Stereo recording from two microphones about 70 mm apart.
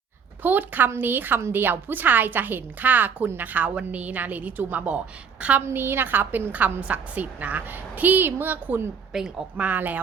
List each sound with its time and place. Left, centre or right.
0.4 s a woman's voice: right
5.6 s a woman's voice: right
9.1 s a woman's voice: centre
9.6 s a woman's voice: right